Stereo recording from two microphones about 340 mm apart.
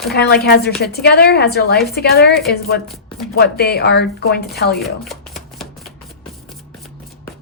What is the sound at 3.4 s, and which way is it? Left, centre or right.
Speech, left.